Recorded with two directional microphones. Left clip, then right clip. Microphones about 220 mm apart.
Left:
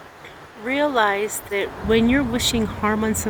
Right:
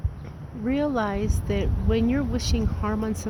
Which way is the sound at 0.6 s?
5° right (ahead or behind).